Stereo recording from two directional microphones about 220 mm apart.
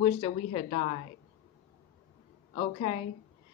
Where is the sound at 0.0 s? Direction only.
25° left (ahead or behind).